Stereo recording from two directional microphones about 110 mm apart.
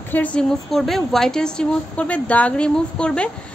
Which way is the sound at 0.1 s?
10° left (ahead or behind).